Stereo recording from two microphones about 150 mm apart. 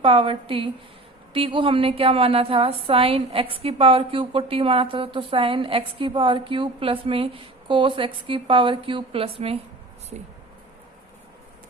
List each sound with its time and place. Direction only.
0.0 s a woman's voice: 35° right (ahead or behind)